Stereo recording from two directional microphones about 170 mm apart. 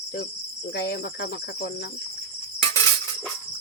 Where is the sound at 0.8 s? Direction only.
60° left (ahead or behind).